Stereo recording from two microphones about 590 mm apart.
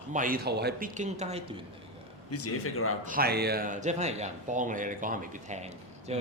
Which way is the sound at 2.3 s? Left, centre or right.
Left.